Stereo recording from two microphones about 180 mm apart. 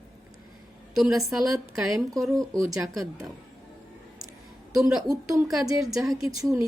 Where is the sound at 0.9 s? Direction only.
Centre (ahead or behind).